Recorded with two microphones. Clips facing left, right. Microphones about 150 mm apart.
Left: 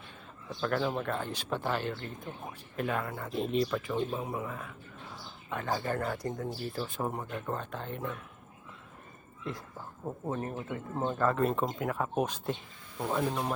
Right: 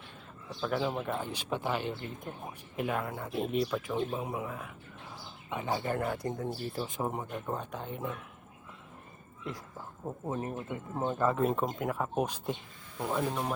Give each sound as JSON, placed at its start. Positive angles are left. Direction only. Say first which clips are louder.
{"t": 0.6, "sound": "speech", "louder": "left 1 dB", "side_deg": -5}
{"t": 10.0, "sound": "speech", "louder": "left 1 dB", "side_deg": 0}
{"t": 10.7, "sound": "speech", "louder": "left 1 dB", "side_deg": -15}